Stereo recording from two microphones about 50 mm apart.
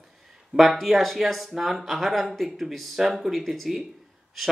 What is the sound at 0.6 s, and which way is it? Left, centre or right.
Speech, centre.